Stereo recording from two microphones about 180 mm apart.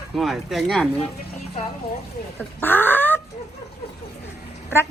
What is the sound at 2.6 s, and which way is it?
Speech, 10° left (ahead or behind).